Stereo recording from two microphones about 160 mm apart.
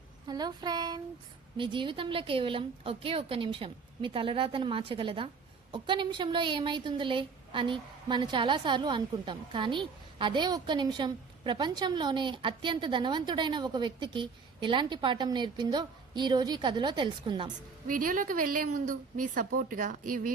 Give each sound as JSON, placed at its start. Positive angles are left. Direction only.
{"t": 0.3, "sound": "a woman's voice", "side_deg": -25}
{"t": 17.8, "sound": "a woman's voice", "side_deg": -60}